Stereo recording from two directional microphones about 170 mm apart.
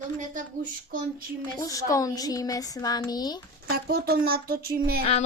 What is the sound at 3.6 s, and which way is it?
Speech, 65° right (ahead or behind).